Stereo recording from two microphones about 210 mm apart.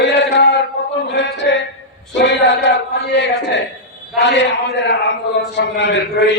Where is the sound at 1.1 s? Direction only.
55° left (ahead or behind).